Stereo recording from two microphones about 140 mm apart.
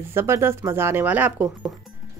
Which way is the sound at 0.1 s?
20° right (ahead or behind).